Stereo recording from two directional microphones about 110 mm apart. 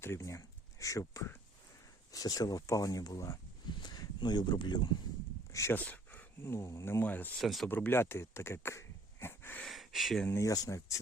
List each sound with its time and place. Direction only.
0.0 s speech: 25° left (ahead or behind)
3.7 s a sound: 40° left (ahead or behind)
5.7 s speech: 15° left (ahead or behind)
7.0 s speech: 15° left (ahead or behind)
7.3 s speech: centre (ahead or behind)
7.7 s speech: 20° left (ahead or behind)
9.2 s wheeze: 20° left (ahead or behind)
9.6 s speech: centre (ahead or behind)
10.2 s speech: 20° left (ahead or behind)